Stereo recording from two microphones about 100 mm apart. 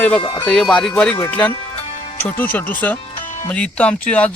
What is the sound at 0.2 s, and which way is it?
Speech, 50° left (ahead or behind).